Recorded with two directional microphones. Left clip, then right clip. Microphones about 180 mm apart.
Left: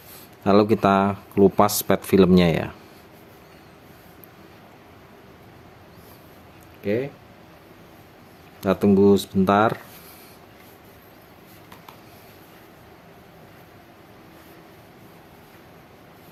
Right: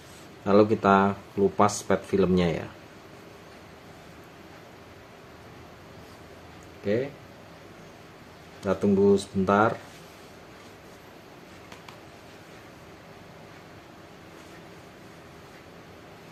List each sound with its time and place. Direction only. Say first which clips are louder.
0.4 s speech: left 3 dB; 60° left (ahead or behind)
6.8 s speech: left 2 dB; 45° left (ahead or behind)
8.6 s speech: left 5 dB; 60° left (ahead or behind)